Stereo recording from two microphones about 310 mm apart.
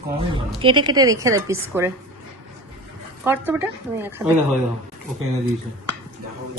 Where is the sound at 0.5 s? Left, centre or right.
Centre.